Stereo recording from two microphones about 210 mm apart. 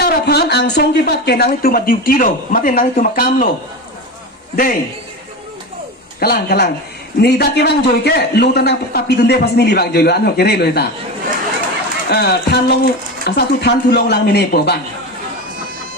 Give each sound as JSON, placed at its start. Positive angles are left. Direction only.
{"t": 0.0, "sound": "a man's voice", "side_deg": 50}
{"t": 4.5, "sound": "a man's voice", "side_deg": 40}
{"t": 6.1, "sound": "a man's voice", "side_deg": 45}
{"t": 12.1, "sound": "a man's voice", "side_deg": 50}